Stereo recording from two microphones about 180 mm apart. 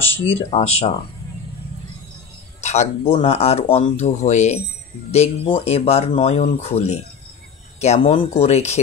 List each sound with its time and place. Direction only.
0.2 s speech: 30° left (ahead or behind)
2.6 s speech: 40° left (ahead or behind)